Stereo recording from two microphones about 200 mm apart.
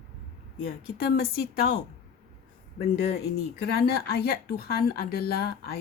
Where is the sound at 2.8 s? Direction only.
50° left (ahead or behind).